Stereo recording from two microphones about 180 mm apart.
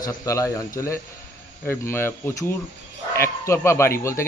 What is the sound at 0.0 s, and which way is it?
A man's voice, 15° left (ahead or behind).